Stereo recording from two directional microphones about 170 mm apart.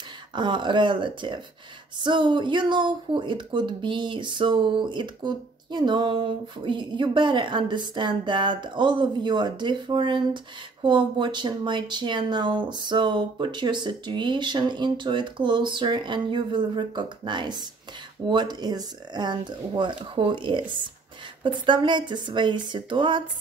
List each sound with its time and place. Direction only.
0.3 s speech: 25° right (ahead or behind)